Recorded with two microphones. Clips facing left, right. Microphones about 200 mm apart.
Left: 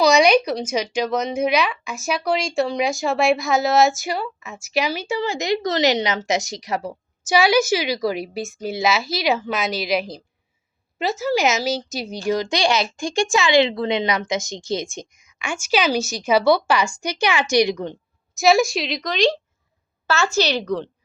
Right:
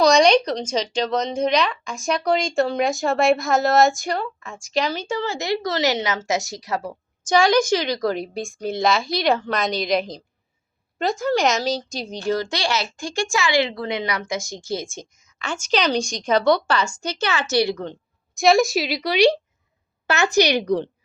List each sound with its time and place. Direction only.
0.0 s a woman's voice: 5° left (ahead or behind)
18.3 s a woman's voice: centre (ahead or behind)